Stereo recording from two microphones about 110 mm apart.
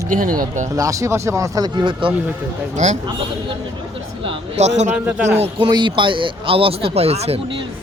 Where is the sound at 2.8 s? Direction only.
90° right.